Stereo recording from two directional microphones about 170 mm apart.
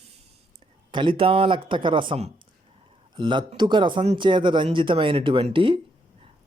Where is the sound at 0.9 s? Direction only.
30° right (ahead or behind).